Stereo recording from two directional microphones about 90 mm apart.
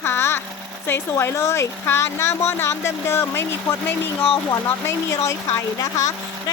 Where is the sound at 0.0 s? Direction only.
25° left (ahead or behind).